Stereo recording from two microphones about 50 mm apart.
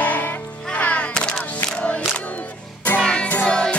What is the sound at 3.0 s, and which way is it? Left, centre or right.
Music, centre.